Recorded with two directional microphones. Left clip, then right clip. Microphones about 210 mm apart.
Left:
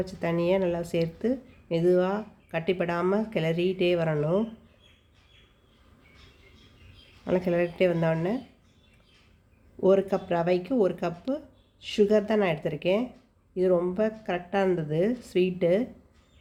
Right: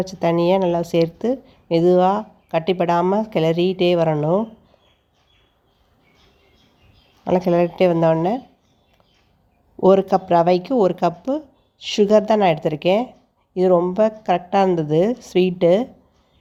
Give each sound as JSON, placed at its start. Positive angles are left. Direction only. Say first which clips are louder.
{"t": 0.0, "sound": "speech", "louder": "right 9 dB", "side_deg": -35}
{"t": 7.3, "sound": "speech", "louder": "right 8 dB", "side_deg": -35}
{"t": 9.8, "sound": "speech", "louder": "right 8 dB", "side_deg": -35}